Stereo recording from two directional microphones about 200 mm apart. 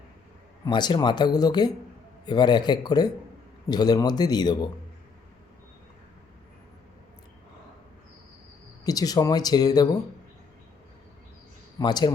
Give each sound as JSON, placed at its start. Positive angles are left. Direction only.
{"t": 0.6, "sound": "speech", "side_deg": 20}
{"t": 8.8, "sound": "speech", "side_deg": 20}
{"t": 11.8, "sound": "speech", "side_deg": 20}